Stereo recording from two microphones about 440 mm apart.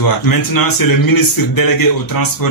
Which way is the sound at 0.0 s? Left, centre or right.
Left.